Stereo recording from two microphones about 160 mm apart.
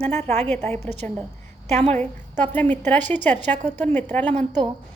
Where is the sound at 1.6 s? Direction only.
45° right (ahead or behind).